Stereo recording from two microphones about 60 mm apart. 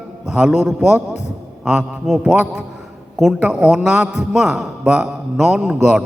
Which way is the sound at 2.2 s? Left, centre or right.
Centre.